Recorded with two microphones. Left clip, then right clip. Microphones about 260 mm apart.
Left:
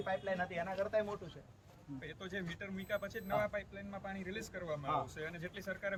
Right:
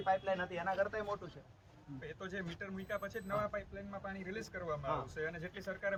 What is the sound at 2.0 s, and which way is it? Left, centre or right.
Speech, centre.